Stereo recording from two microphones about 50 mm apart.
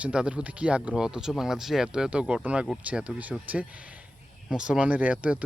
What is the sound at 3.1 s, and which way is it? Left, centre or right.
Speech, right.